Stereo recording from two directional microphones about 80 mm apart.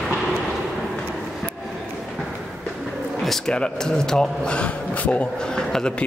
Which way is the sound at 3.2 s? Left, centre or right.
Centre.